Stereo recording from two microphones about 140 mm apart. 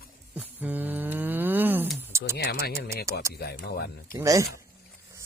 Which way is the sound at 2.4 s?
90° left.